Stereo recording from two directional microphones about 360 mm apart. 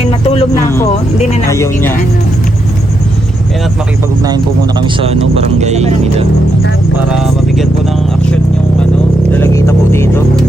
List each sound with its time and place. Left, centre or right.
0.1 s a sound: centre
1.2 s speech: centre
1.5 s speech: centre
4.8 s speech: centre
7.1 s vehicle: centre
9.3 s speech: centre